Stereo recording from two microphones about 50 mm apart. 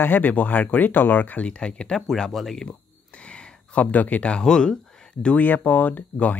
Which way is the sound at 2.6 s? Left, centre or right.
Left.